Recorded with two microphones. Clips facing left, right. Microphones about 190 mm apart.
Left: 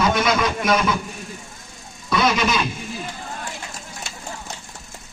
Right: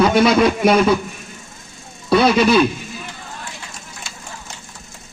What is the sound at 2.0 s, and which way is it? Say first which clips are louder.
Music: right 7 dB; 30° right (ahead or behind).